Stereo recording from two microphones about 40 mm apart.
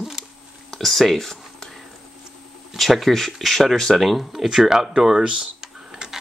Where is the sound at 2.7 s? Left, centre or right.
Centre.